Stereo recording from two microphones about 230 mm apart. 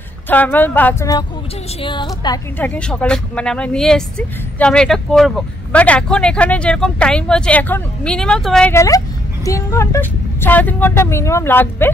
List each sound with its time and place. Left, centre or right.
0.3 s a woman's voice: centre